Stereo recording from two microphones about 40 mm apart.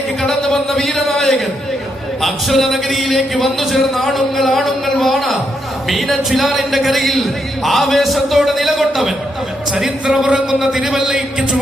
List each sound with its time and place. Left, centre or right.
0.2 s a man's voice: centre
10.1 s speech: right
10.6 s a man's voice: centre